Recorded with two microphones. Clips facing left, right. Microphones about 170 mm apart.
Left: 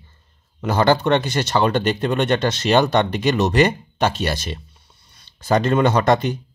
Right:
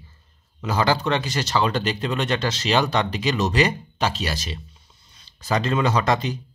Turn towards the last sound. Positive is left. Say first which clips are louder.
# left 5 dB
turn(degrees=55)  # may be behind; listen again after turning